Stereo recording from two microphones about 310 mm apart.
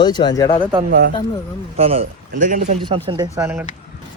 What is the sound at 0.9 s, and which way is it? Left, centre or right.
Speech, right.